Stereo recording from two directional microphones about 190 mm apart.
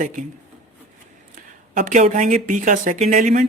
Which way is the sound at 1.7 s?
40° right (ahead or behind).